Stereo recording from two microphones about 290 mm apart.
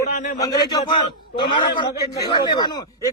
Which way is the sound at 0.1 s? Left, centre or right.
Left.